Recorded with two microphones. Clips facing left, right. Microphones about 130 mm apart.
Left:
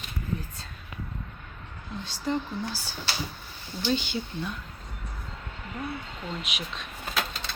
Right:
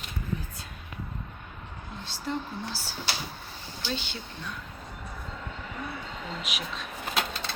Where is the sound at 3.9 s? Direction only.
Centre (ahead or behind).